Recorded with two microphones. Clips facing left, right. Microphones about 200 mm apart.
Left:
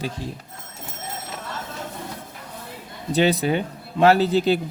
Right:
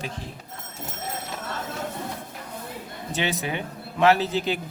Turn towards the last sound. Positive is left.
turn(degrees=35)  # may be behind; listen again after turning